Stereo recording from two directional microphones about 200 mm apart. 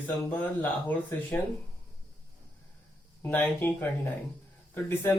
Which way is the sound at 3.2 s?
10° left (ahead or behind).